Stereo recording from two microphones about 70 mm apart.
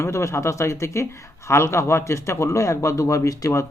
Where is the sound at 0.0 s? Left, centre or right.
Left.